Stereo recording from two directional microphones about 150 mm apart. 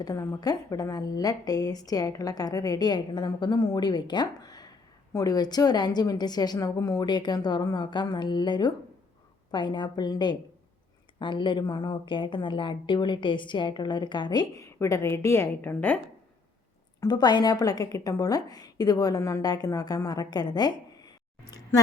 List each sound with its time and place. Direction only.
0.0 s a woman's voice: 25° left (ahead or behind)
17.0 s a woman's voice: 30° left (ahead or behind)